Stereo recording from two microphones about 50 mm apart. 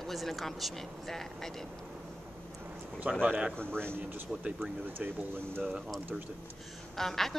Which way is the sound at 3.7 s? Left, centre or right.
Right.